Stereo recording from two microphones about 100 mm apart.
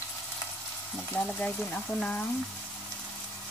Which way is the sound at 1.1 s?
10° left (ahead or behind).